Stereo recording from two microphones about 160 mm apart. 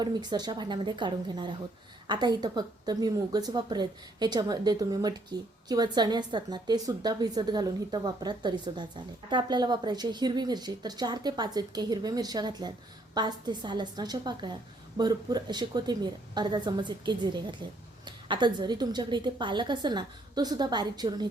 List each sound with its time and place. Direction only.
0.0 s speech: 25° right (ahead or behind)